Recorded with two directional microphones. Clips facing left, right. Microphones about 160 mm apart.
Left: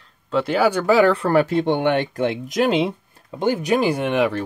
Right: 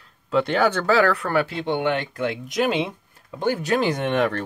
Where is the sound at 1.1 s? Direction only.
35° left (ahead or behind).